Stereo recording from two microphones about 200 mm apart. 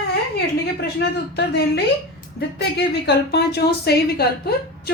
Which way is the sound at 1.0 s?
55° left (ahead or behind).